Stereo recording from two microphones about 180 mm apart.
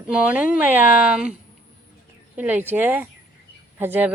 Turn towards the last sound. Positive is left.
turn(degrees=-10)  # may be behind; listen again after turning